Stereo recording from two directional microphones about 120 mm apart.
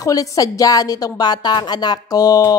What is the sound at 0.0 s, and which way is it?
Speech, 30° left (ahead or behind).